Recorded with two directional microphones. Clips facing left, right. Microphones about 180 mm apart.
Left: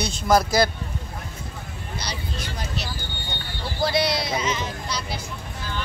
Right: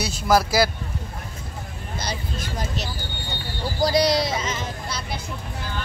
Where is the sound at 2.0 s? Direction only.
50° right (ahead or behind).